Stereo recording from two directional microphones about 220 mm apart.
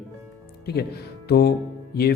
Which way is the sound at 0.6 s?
45° left (ahead or behind).